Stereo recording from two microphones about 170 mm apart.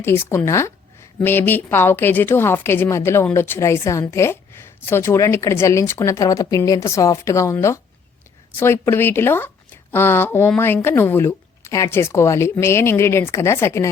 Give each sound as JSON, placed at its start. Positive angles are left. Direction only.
{"t": 0.0, "sound": "a woman's voice", "side_deg": 15}